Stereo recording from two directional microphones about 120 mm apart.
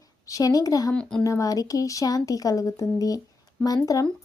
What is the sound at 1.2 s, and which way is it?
Speech, 30° left (ahead or behind).